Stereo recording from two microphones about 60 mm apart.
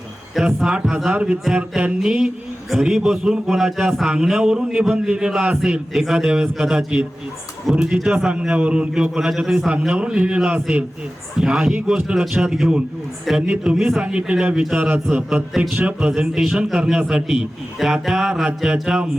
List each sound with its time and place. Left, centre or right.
0.3 s a man's voice: centre
1.1 s a man's voice: right